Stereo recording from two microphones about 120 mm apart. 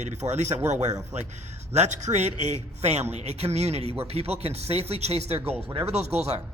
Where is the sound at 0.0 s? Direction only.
75° right (ahead or behind).